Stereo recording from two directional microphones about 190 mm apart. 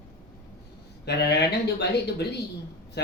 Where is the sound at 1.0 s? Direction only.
60° left (ahead or behind).